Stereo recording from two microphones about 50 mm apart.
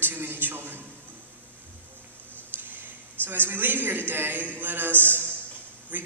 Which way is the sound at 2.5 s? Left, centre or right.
Right.